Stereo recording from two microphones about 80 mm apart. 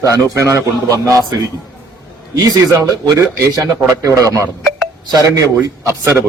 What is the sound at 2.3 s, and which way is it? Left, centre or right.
A man's voice, right.